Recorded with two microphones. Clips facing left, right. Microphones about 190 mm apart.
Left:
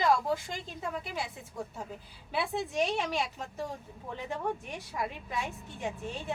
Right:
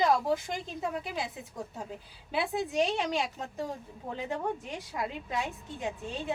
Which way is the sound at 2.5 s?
20° right (ahead or behind).